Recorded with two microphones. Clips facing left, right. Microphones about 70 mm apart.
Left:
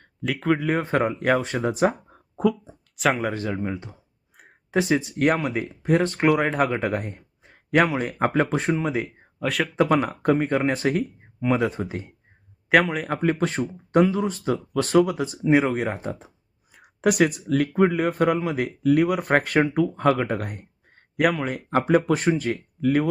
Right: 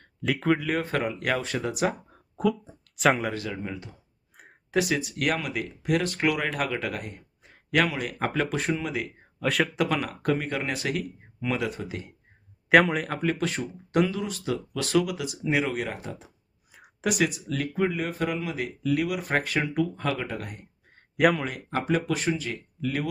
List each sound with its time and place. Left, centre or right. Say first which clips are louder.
0.3 s speech: left 1 dB; centre
0.6 s speech: left 5 dB; left
2.4 s speech: left 3 dB; centre
3.3 s speech: left 5 dB; left
9.4 s speech: even; centre
9.7 s speech: left 6 dB; left
12.7 s speech: even; centre
13.2 s speech: left 7 dB; left
17.0 s speech: left 6 dB; left
21.2 s speech: left 1 dB; centre
21.5 s speech: left 7 dB; left